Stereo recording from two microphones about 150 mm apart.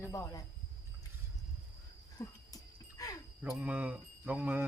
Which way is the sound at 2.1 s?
25° left (ahead or behind).